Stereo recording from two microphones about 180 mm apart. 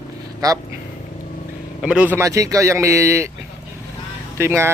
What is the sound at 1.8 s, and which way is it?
Speech, 5° right (ahead or behind).